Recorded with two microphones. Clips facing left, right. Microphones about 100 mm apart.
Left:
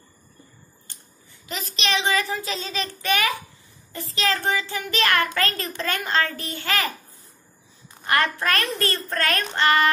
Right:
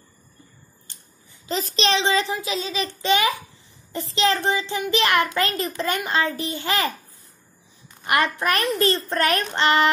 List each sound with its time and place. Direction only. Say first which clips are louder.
1.5 s a child's voice: right 4 dB; 35° right (ahead or behind)
2.4 s a child's voice: right 3 dB; 5° right (ahead or behind)
2.8 s a child's voice: right 3 dB; 20° right (ahead or behind)
8.0 s a child's voice: right 1 dB; 15° right (ahead or behind)